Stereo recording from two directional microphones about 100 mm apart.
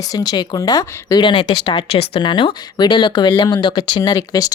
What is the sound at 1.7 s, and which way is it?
Speech, 75° left (ahead or behind).